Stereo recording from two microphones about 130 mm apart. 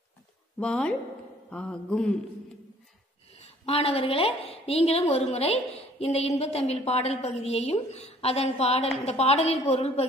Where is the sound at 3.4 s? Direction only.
50° left (ahead or behind).